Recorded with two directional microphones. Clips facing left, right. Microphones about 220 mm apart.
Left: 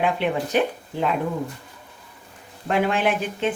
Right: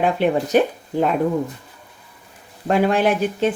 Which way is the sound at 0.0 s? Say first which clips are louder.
Right 4 dB; 40° right (ahead or behind).